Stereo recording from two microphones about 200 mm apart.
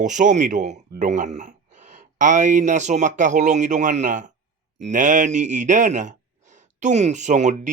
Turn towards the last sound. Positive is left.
turn(degrees=-35)  # may be behind; listen again after turning